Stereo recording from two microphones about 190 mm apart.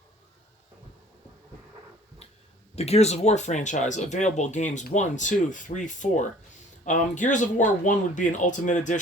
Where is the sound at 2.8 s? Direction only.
35° left (ahead or behind).